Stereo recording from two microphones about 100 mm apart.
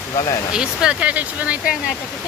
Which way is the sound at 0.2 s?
40° left (ahead or behind).